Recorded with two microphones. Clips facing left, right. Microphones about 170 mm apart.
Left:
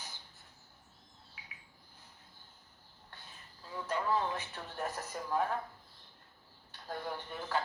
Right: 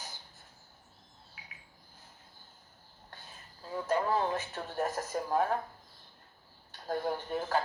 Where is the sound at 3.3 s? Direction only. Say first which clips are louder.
Right 7 dB; 45° right (ahead or behind).